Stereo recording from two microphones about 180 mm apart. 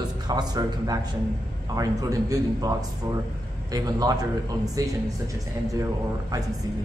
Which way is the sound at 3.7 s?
20° right (ahead or behind).